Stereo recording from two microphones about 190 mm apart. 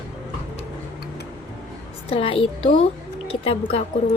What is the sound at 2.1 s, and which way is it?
A woman's voice, 30° left (ahead or behind).